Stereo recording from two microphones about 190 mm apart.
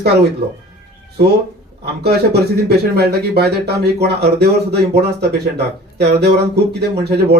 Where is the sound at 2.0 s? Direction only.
60° right (ahead or behind).